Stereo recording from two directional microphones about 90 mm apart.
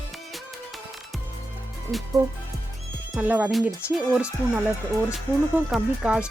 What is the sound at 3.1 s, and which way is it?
Speech, 15° right (ahead or behind).